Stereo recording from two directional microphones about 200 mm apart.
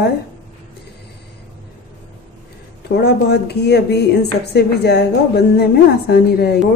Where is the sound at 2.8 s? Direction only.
55° left (ahead or behind).